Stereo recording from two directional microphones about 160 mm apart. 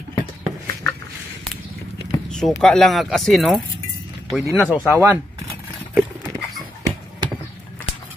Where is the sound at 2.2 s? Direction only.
5° left (ahead or behind).